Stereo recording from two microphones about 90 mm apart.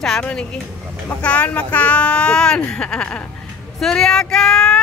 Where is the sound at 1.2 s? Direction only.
15° left (ahead or behind).